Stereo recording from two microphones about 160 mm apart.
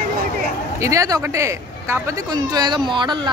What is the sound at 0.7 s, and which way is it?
Speech, 20° right (ahead or behind).